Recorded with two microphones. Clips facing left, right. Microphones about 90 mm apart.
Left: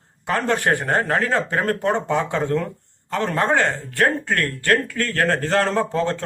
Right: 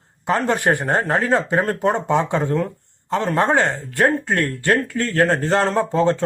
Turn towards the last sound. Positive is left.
turn(degrees=-20)  # may be behind; listen again after turning